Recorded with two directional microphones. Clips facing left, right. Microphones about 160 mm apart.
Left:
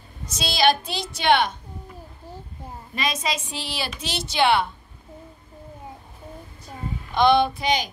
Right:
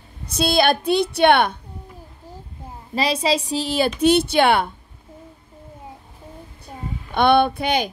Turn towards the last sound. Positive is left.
turn(degrees=-60)  # may be behind; listen again after turning